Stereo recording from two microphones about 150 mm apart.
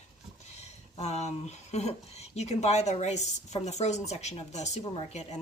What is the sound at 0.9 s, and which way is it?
Speech, 45° left (ahead or behind).